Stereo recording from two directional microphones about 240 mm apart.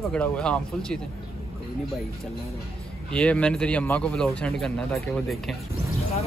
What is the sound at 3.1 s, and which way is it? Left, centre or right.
Speech, centre.